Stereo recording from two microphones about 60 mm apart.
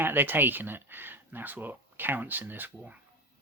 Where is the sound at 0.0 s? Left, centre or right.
Right.